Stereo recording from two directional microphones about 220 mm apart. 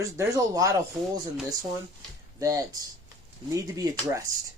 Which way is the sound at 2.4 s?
15° right (ahead or behind).